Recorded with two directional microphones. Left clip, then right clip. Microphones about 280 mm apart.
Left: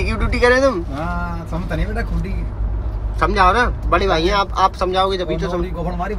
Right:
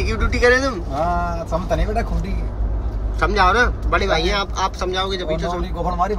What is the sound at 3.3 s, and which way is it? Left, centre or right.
Speech, centre.